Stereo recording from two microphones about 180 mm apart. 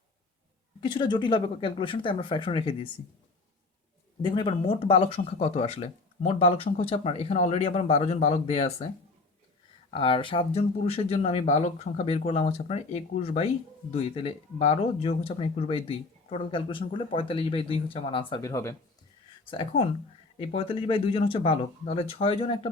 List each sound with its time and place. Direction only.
0.8 s speech: 25° left (ahead or behind)
4.2 s speech: 25° left (ahead or behind)
9.9 s speech: 30° left (ahead or behind)
18.5 s speech: 15° left (ahead or behind)
19.5 s speech: 30° left (ahead or behind)